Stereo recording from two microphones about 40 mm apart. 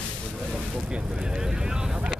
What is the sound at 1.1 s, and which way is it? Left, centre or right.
Vehicle, centre.